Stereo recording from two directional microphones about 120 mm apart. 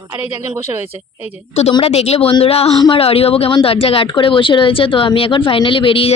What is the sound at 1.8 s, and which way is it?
Speech, 60° left (ahead or behind).